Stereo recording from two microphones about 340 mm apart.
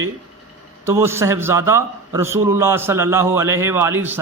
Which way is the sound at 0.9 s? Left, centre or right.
Centre.